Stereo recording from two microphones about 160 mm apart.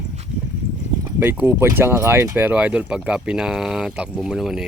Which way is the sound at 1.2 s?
10° right (ahead or behind).